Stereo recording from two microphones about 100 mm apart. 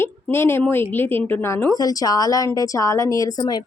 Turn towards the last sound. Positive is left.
turn(degrees=40)  # may be behind; listen again after turning